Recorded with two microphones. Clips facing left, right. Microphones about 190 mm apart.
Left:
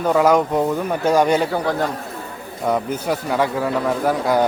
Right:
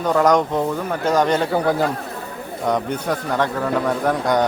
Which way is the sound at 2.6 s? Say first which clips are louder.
Left 1 dB; 5° left (ahead or behind).